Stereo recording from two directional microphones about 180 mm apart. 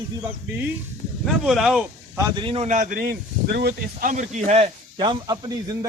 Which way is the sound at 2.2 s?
20° right (ahead or behind).